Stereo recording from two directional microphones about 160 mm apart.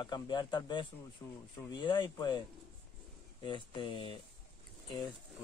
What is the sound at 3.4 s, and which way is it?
Speech, 30° left (ahead or behind).